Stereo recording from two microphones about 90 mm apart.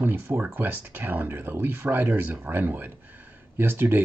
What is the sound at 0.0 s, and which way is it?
Speech, 20° right (ahead or behind).